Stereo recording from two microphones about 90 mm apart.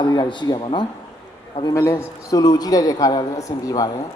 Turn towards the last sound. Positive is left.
turn(degrees=40)  # may be behind; listen again after turning